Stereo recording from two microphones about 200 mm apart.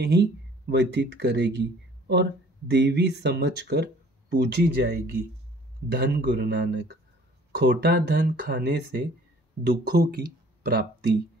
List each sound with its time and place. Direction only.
0.0 s speech: 55° right (ahead or behind)